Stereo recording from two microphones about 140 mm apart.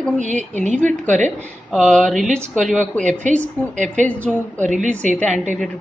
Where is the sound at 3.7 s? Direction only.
60° right (ahead or behind).